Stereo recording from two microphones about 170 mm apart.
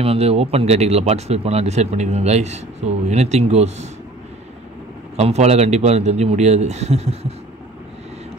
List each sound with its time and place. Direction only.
0.0 s speech: 35° right (ahead or behind)
5.1 s speech: 40° right (ahead or behind)